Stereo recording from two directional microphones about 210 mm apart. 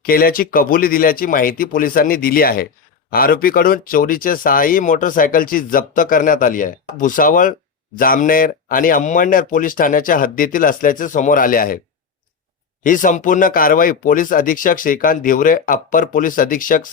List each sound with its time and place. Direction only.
0.0 s speech: 45° left (ahead or behind)
12.8 s speech: 40° left (ahead or behind)